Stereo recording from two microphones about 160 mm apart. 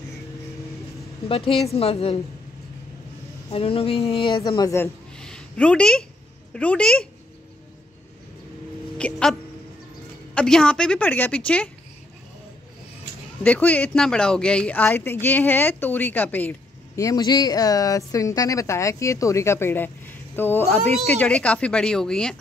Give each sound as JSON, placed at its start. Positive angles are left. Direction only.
{"t": 1.3, "sound": "speech", "side_deg": 35}
{"t": 3.4, "sound": "speech", "side_deg": 35}
{"t": 4.4, "sound": "a woman's voice", "side_deg": 25}
{"t": 5.1, "sound": "a sound", "side_deg": 5}
{"t": 6.5, "sound": "a woman's voice", "side_deg": 5}
{"t": 8.9, "sound": "speech", "side_deg": 5}
{"t": 13.4, "sound": "a woman's voice", "side_deg": 10}